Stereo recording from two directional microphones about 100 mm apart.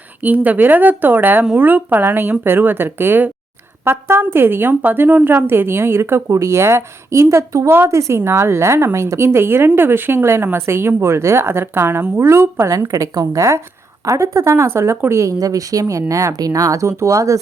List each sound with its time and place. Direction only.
0.2 s a woman's voice: 15° right (ahead or behind); by 17.4 s 35° right (ahead or behind)